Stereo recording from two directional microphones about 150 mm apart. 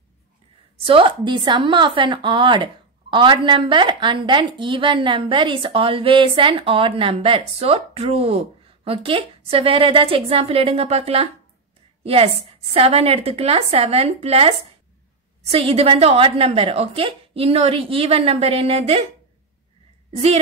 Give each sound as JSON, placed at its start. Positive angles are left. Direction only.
{"t": 0.7, "sound": "a woman's voice", "side_deg": -35}